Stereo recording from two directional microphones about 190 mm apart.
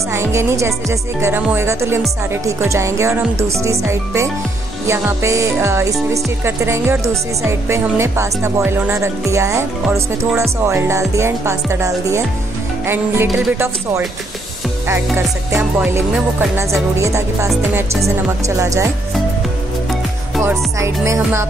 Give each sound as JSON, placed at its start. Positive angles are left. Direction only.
{"t": 0.1, "sound": "music", "side_deg": -15}
{"t": 14.9, "sound": "music", "side_deg": -15}
{"t": 18.6, "sound": "music", "side_deg": -15}
{"t": 20.4, "sound": "music", "side_deg": -15}